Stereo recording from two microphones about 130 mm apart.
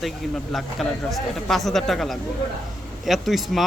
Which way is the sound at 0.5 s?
Centre (ahead or behind).